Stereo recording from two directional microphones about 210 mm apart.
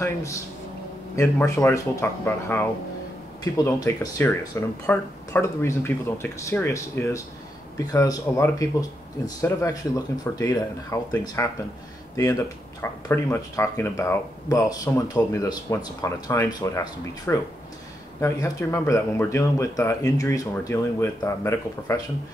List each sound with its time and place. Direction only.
0.0 s speech: 15° left (ahead or behind)
1.4 s speech: 15° left (ahead or behind)
12.8 s speech: 10° left (ahead or behind)